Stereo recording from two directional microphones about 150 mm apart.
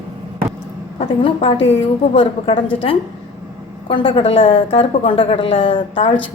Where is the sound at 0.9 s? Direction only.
40° left (ahead or behind).